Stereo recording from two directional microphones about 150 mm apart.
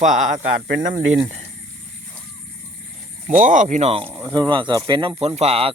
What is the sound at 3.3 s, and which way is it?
Speech, 55° right (ahead or behind).